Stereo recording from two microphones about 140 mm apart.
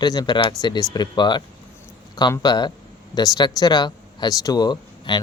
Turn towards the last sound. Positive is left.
turn(degrees=30)  # may be behind; listen again after turning